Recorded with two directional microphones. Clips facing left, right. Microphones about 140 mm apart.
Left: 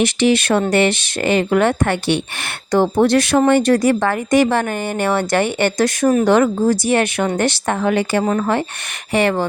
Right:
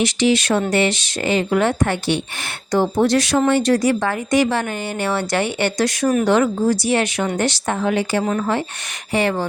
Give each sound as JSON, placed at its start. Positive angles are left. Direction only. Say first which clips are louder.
{"t": 0.0, "sound": "speech", "louder": "left 2 dB", "side_deg": 55}
{"t": 8.2, "sound": "speech", "louder": "left 3 dB", "side_deg": 50}